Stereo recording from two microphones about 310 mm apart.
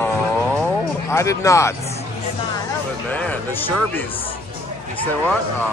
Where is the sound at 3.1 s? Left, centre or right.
Centre.